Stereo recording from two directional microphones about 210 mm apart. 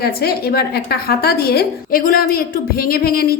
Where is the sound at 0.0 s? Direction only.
50° left (ahead or behind).